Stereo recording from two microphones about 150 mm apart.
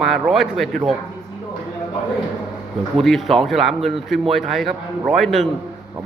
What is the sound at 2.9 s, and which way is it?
Speech, centre (ahead or behind).